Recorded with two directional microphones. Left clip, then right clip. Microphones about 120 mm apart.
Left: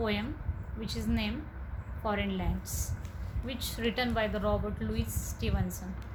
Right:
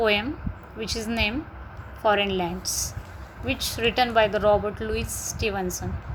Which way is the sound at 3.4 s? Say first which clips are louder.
Right 10 dB; 35° right (ahead or behind).